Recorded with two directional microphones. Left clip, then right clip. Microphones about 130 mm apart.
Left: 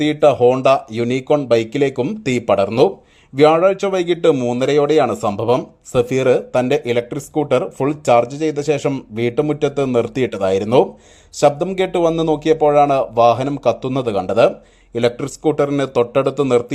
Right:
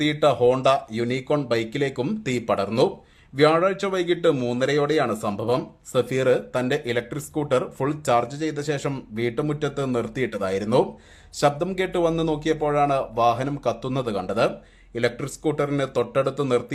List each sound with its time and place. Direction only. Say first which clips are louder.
0.0 s speech: left 7 dB; 30° left (ahead or behind)
4.4 s speech: left 7 dB; 25° left (ahead or behind)
4.6 s speech: left 7 dB; 40° left (ahead or behind)